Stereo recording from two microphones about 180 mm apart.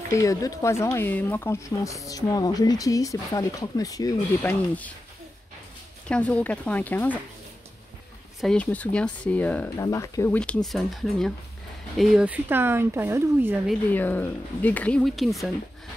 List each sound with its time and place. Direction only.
0.1 s speech: 20° left (ahead or behind)
6.0 s speech: 5° left (ahead or behind)
8.4 s speech: 5° left (ahead or behind); by 13.6 s 10° right (ahead or behind)
13.8 s speech: 10° left (ahead or behind)